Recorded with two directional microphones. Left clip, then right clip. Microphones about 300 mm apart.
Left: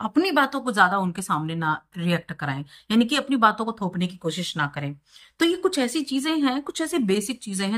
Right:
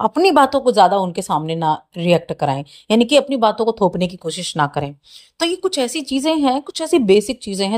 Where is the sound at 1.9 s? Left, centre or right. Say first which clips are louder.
Right 12 dB; centre.